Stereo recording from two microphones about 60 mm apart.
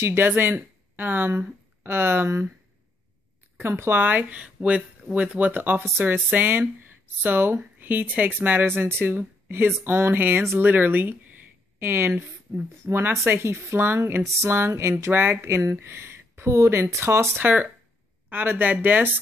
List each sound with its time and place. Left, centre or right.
0.0 s speech: right
3.5 s speech: right
4.4 s speech: centre
5.5 s speech: right
15.1 s speech: right
17.4 s speech: right